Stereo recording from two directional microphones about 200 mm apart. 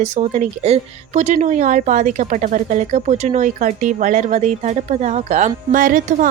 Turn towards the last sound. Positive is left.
turn(degrees=-40)  # may be behind; listen again after turning